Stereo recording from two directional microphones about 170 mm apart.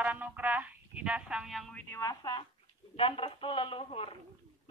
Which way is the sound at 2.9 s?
35° left (ahead or behind).